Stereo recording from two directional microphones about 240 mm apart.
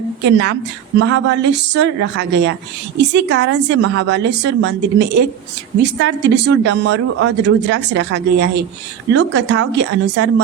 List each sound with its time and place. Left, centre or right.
0.3 s speech: right